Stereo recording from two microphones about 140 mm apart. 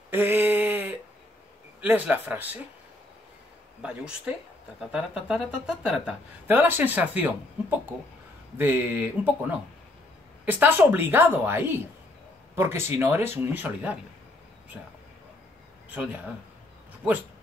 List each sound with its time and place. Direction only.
0.1 s a sound: 15° right (ahead or behind)
1.8 s speech: 10° right (ahead or behind)
4.9 s speech: centre (ahead or behind)
8.5 s speech: 15° right (ahead or behind)
15.9 s speech: 10° right (ahead or behind)